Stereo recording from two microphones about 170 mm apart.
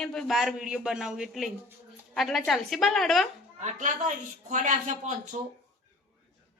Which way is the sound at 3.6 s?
45° right (ahead or behind).